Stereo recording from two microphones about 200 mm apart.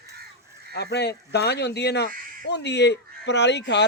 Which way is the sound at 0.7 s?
55° left (ahead or behind).